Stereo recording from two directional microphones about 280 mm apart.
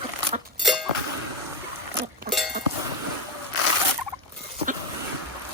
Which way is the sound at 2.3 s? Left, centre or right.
Right.